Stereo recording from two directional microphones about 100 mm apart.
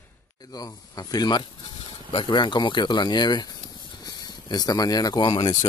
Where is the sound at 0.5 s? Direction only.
40° left (ahead or behind).